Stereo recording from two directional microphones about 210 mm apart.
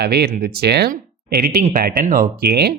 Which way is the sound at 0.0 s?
50° right (ahead or behind).